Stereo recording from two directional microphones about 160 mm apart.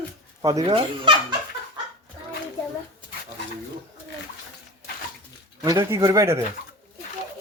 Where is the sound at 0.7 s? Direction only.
30° right (ahead or behind).